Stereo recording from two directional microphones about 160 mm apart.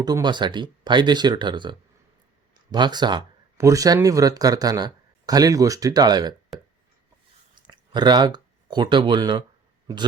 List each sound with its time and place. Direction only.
0.0 s speech: 25° right (ahead or behind)
2.7 s speech: 25° right (ahead or behind)
7.5 s a sound: 30° right (ahead or behind)
9.8 s a man's voice: 25° right (ahead or behind)